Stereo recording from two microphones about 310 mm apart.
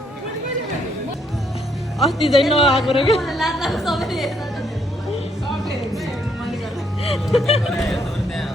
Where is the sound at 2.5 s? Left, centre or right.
Centre.